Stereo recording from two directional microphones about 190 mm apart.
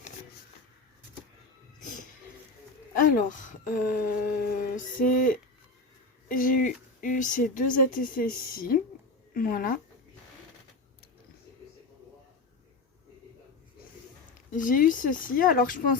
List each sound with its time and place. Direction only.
2.9 s speech: 45° left (ahead or behind)
14.3 s speech: 45° left (ahead or behind)